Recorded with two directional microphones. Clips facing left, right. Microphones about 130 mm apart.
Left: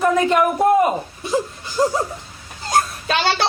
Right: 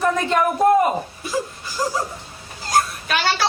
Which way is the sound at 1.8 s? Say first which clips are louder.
Left 5 dB; 25° left (ahead or behind).